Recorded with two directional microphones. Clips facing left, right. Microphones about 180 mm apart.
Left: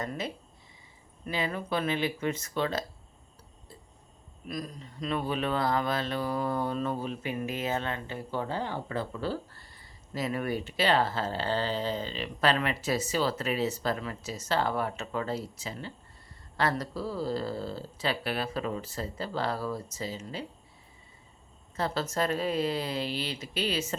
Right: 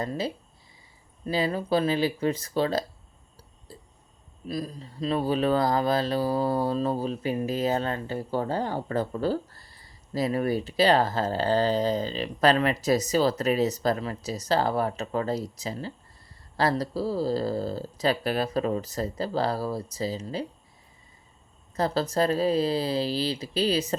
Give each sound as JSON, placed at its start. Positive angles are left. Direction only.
{"t": 0.0, "sound": "speech", "side_deg": -30}
{"t": 3.7, "sound": "a sound", "side_deg": -35}
{"t": 4.4, "sound": "speech", "side_deg": -30}
{"t": 21.8, "sound": "speech", "side_deg": -35}